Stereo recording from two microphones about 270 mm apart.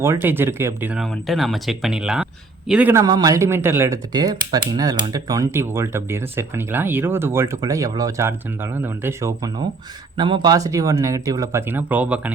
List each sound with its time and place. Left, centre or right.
0.0 s speech: centre